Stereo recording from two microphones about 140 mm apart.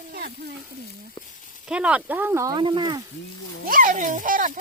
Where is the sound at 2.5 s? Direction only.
35° right (ahead or behind).